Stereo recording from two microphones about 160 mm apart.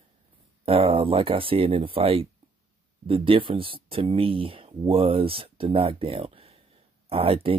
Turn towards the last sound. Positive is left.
turn(degrees=-35)  # may be behind; listen again after turning